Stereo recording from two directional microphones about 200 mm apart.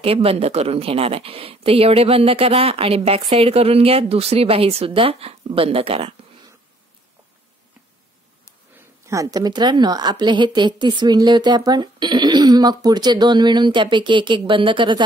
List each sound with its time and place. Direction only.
0.0 s speech: 30° right (ahead or behind)
9.0 s speech: 15° right (ahead or behind)